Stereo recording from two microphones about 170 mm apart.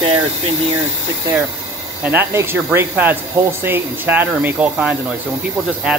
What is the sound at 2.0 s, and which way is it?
Speech, 10° right (ahead or behind).